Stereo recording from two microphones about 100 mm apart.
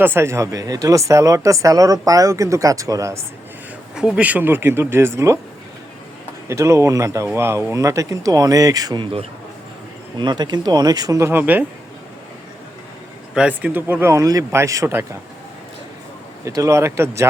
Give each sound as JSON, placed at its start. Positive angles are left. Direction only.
{"t": 0.0, "sound": "speech", "side_deg": -25}
{"t": 3.9, "sound": "speech", "side_deg": -10}
{"t": 6.5, "sound": "speech", "side_deg": -30}
{"t": 10.2, "sound": "speech", "side_deg": -45}
{"t": 13.3, "sound": "speech", "side_deg": -10}
{"t": 16.4, "sound": "speech", "side_deg": -35}